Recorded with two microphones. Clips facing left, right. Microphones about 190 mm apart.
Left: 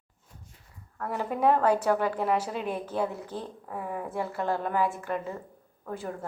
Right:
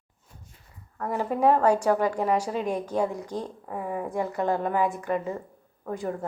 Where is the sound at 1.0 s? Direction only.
10° right (ahead or behind).